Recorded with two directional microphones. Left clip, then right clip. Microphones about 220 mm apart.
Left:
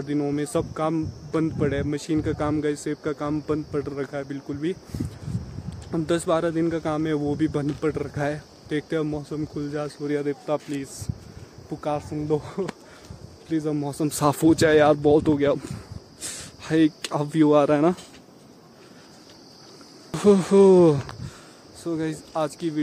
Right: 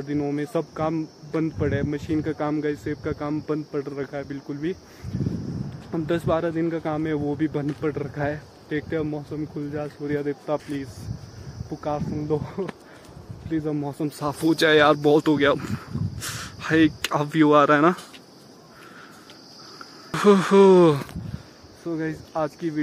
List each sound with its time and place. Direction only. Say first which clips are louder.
0.0 s speech: left 1 dB; 10° left (ahead or behind)
5.9 s speech: left 1 dB; 10° left (ahead or behind)
14.0 s speech: left 7 dB; 45° left (ahead or behind)
14.4 s speech: right 1 dB; 20° left (ahead or behind)
20.1 s speech: right 1 dB; 10° left (ahead or behind)